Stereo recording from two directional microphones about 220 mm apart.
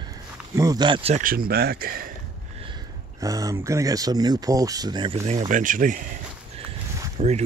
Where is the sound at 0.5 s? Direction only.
15° right (ahead or behind); by 2.1 s 40° right (ahead or behind).